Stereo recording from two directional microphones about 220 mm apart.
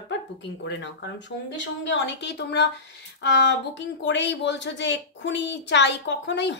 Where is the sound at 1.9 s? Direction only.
55° left (ahead or behind).